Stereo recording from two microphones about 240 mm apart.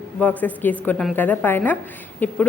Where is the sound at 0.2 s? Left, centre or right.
Centre.